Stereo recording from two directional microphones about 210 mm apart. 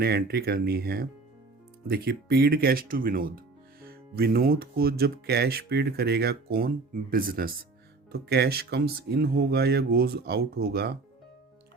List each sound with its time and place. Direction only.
0.0 s speech: 50° right (ahead or behind)